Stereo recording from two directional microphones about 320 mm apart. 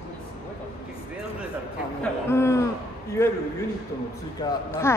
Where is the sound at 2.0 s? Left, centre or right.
Centre.